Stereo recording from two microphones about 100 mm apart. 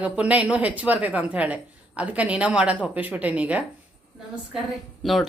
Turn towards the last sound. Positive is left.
turn(degrees=0)  # may be behind; listen again after turning